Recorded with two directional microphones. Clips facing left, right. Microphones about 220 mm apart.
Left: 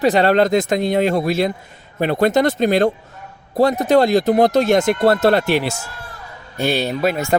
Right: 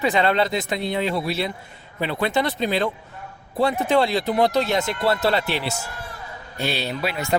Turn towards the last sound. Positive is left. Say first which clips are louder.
# left 6 dB
turn(degrees=45)  # may be behind; listen again after turning